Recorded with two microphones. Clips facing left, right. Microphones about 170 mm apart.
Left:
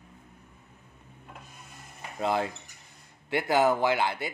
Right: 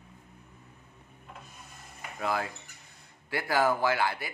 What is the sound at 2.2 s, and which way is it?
A man's voice, 25° left (ahead or behind).